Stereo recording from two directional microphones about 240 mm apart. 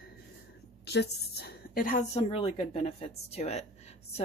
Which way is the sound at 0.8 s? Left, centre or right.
Left.